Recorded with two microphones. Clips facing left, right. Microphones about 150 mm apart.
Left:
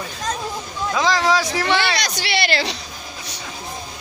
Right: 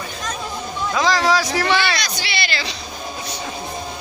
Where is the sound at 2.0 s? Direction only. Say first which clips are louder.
Left 3 dB; 70° left (ahead or behind).